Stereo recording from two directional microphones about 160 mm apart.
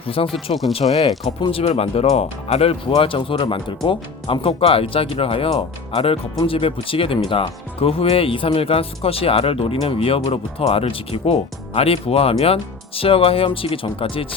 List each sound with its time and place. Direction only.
0.0 s speech: 35° left (ahead or behind)